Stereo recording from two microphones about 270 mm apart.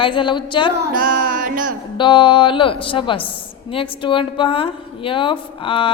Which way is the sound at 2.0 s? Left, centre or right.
Centre.